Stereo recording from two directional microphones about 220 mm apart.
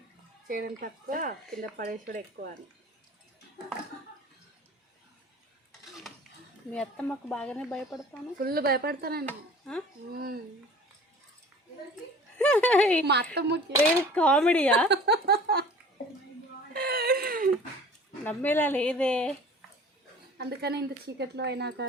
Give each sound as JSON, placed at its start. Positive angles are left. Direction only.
{"t": 0.4, "sound": "speech", "side_deg": -40}
{"t": 6.7, "sound": "speech", "side_deg": 5}
{"t": 8.4, "sound": "speech", "side_deg": -45}
{"t": 9.2, "sound": "speech", "side_deg": 5}
{"t": 10.1, "sound": "speech", "side_deg": -45}
{"t": 12.4, "sound": "speech", "side_deg": 5}
{"t": 13.3, "sound": "speech", "side_deg": -50}
{"t": 14.1, "sound": "speech", "side_deg": 5}
{"t": 14.8, "sound": "speech", "side_deg": -50}
{"t": 16.7, "sound": "a sound", "side_deg": -45}
{"t": 18.3, "sound": "speech", "side_deg": 10}
{"t": 20.4, "sound": "speech", "side_deg": -50}